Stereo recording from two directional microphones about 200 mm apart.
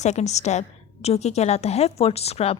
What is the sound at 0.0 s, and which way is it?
A woman's voice, 35° left (ahead or behind).